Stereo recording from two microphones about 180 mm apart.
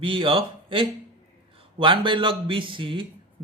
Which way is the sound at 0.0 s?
30° right (ahead or behind).